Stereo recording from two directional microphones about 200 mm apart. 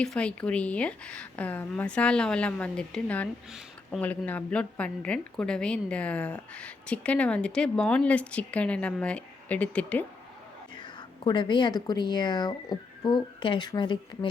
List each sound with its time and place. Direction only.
0.0 s speech: 5° left (ahead or behind)
10.8 s speech: 20° left (ahead or behind)